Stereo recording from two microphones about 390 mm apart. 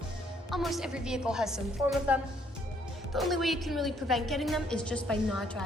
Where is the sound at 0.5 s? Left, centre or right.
Centre.